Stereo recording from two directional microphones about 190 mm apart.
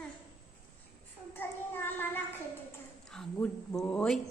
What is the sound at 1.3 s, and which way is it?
Child singing, 10° left (ahead or behind).